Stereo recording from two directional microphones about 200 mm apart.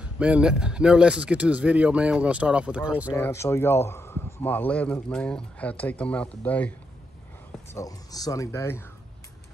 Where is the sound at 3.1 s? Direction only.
10° left (ahead or behind).